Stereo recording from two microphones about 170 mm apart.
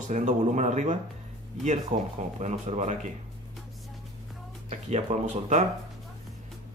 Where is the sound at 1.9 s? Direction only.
55° right (ahead or behind).